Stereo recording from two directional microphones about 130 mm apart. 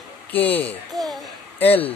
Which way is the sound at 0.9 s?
Centre (ahead or behind).